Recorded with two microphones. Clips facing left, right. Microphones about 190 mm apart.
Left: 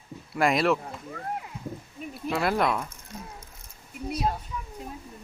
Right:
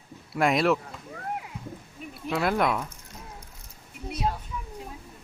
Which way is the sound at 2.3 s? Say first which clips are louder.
Even; centre (ahead or behind).